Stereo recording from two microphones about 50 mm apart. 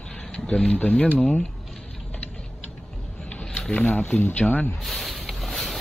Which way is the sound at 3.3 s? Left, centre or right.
Centre.